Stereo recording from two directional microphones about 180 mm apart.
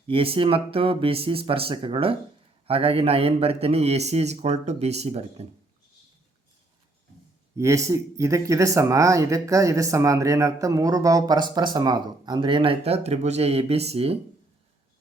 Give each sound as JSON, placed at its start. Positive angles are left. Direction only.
{"t": 0.1, "sound": "a man's voice", "side_deg": -30}
{"t": 7.5, "sound": "speech", "side_deg": -15}